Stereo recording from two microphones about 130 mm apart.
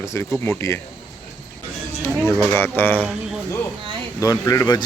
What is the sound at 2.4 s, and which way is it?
Speech, 20° left (ahead or behind).